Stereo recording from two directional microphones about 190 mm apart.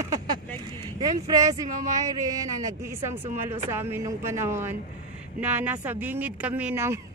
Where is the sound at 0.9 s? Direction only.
20° right (ahead or behind).